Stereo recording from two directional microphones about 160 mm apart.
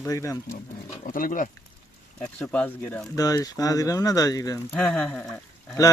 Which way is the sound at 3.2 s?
20° left (ahead or behind).